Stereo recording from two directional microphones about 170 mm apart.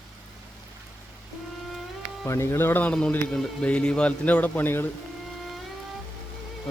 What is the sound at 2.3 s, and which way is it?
A man's voice, 15° left (ahead or behind).